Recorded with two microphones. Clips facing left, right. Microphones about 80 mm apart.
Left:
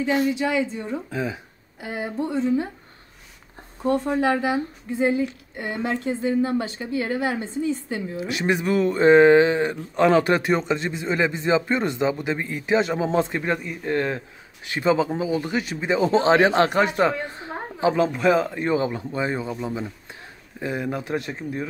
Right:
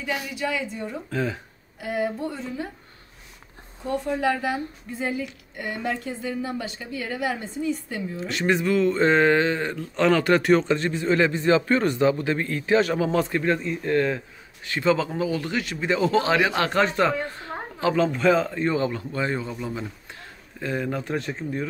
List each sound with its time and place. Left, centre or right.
0.0 s a woman's voice: left; by 1.4 s centre
1.8 s a woman's voice: left
4.0 s a woman's voice: left
16.7 s a woman's voice: centre